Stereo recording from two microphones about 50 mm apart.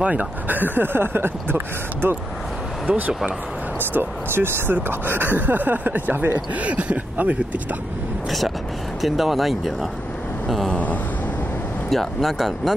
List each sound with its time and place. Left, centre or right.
0.0 s speech: right
2.9 s speech: right
3.9 s speech: right
9.0 s speech: centre
11.9 s speech: centre